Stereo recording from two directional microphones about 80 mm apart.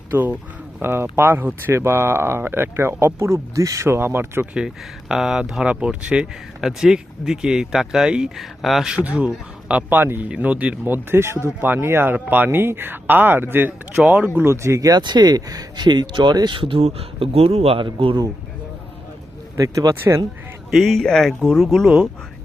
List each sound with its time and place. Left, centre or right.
0.1 s speech: right
4.5 s speech: centre
9.0 s speech: centre
10.0 s speech: right
10.2 s speech: centre; by 16.7 s right
17.7 s speech: right
19.5 s speech: right
20.7 s a man's voice: centre